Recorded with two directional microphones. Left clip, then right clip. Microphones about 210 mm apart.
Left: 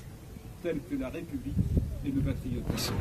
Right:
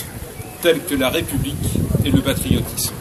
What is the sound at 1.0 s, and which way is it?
Speech, 45° right (ahead or behind).